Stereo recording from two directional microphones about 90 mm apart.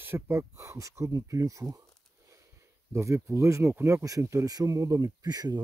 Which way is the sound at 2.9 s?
30° right (ahead or behind).